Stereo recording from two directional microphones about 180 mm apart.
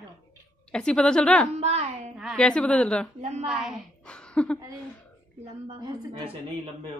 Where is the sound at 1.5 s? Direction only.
35° right (ahead or behind).